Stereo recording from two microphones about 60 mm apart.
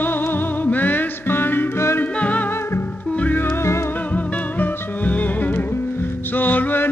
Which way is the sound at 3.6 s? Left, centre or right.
Left.